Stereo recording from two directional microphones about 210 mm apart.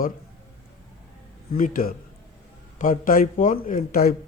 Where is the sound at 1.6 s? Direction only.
40° left (ahead or behind).